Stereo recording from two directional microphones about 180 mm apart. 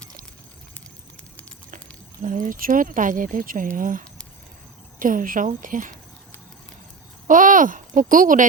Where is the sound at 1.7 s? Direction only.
45° right (ahead or behind).